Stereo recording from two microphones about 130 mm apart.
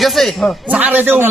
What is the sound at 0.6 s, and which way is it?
Speech, 10° right (ahead or behind).